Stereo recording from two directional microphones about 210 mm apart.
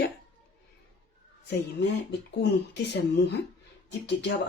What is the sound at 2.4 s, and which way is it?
Speech, 55° left (ahead or behind).